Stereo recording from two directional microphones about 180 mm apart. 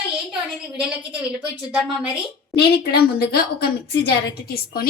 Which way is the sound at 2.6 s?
60° left (ahead or behind).